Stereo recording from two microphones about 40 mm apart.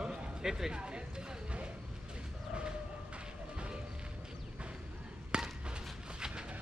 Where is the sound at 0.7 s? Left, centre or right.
Right.